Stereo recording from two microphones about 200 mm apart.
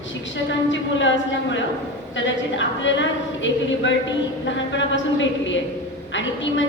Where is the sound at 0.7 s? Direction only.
65° left (ahead or behind).